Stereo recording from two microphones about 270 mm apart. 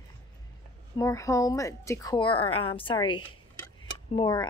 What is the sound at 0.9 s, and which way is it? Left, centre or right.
Speech, centre.